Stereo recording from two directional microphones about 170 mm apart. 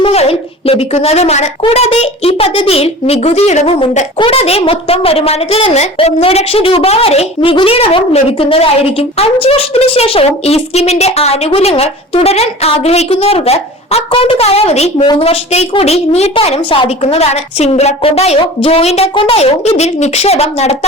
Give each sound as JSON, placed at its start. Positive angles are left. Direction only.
{"t": 0.0, "sound": "a woman's voice", "side_deg": 35}